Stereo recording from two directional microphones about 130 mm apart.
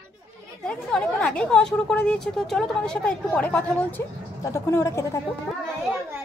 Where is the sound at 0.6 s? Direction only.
5° left (ahead or behind); by 5.2 s 20° left (ahead or behind).